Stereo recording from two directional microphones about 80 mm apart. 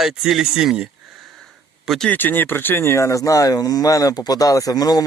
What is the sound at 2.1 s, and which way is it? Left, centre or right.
Speech, left.